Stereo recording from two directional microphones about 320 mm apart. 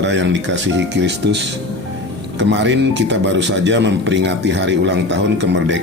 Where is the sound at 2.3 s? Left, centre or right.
Right.